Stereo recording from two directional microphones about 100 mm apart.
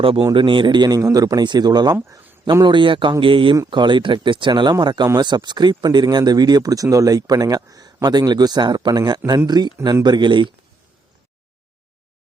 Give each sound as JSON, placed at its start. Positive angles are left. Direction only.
{"t": 0.3, "sound": "a man's voice", "side_deg": -55}
{"t": 2.0, "sound": "a sound", "side_deg": -25}
{"t": 2.5, "sound": "a man's voice", "side_deg": -45}